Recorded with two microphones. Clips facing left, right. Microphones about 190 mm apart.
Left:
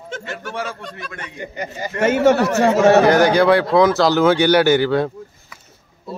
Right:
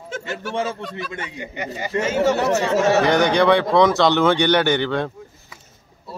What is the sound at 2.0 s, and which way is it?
Speech, 60° left (ahead or behind).